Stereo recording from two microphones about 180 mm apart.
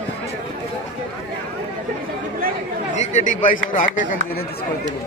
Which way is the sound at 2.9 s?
45° left (ahead or behind).